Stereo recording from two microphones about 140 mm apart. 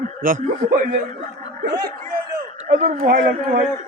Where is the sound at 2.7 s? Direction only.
70° right (ahead or behind).